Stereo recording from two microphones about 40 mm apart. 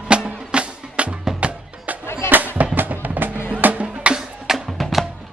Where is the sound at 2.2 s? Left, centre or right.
Right.